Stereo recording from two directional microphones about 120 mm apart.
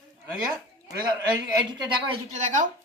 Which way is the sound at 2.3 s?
90° right.